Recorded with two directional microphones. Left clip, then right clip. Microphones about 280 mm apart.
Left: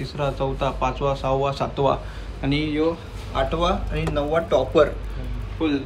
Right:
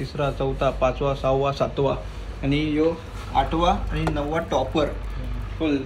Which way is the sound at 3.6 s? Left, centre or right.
Centre.